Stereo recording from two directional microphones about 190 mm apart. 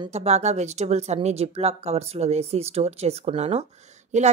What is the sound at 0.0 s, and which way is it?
Speech, 35° right (ahead or behind).